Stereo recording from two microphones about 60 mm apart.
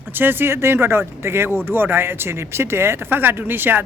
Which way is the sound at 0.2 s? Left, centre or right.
Right.